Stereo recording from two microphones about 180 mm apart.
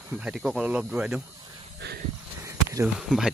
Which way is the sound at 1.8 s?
65° right (ahead or behind).